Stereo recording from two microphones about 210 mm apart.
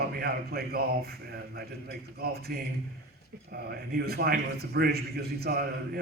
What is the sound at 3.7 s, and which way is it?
A man's voice, 45° right (ahead or behind).